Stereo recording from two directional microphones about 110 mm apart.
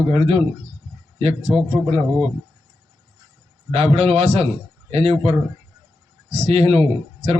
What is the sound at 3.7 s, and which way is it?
Speech, 75° right (ahead or behind).